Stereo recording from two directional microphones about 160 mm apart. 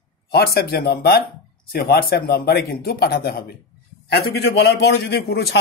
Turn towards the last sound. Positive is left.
turn(degrees=80)